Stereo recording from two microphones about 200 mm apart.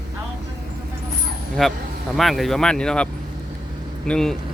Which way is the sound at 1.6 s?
Centre (ahead or behind).